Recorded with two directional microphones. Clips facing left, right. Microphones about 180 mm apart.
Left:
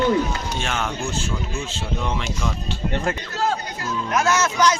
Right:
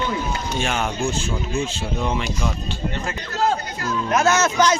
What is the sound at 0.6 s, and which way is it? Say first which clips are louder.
Speech: right 5 dB; 15° right (ahead or behind).